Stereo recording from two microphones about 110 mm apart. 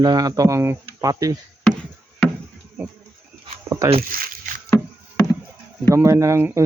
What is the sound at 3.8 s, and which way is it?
Speech, 25° right (ahead or behind).